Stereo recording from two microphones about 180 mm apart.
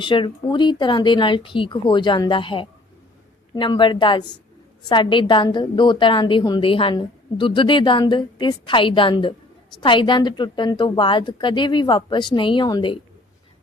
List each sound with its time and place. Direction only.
0.0 s a woman's voice: 25° left (ahead or behind)